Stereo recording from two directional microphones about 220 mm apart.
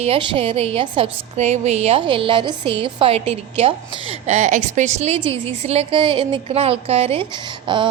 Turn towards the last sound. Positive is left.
turn(degrees=-20)  # may be behind; listen again after turning